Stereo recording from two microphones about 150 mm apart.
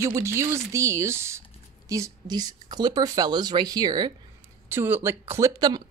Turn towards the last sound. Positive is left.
turn(degrees=-15)  # may be behind; listen again after turning